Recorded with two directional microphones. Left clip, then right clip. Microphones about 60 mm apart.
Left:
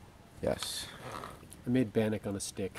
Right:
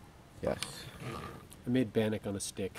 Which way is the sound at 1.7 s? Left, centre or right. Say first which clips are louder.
Left 1 dB; centre.